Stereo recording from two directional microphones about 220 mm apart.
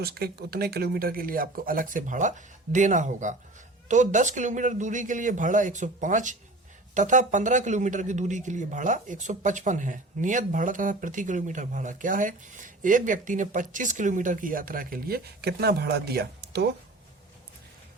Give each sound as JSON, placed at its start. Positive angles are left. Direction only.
{"t": 0.0, "sound": "speech", "side_deg": -45}